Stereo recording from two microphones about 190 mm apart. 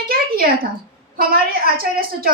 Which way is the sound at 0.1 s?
50° right (ahead or behind).